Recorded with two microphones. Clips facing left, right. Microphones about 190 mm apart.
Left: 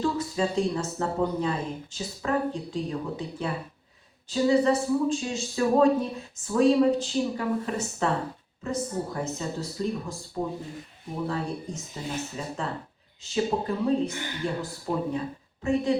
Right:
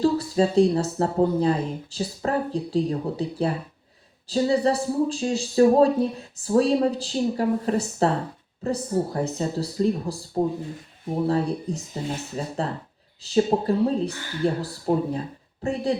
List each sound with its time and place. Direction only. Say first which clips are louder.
0.0 s speech: right 6 dB; 35° right (ahead or behind)
14.1 s speech: left 2 dB; 20° left (ahead or behind)
14.4 s speech: right 8 dB; 35° right (ahead or behind)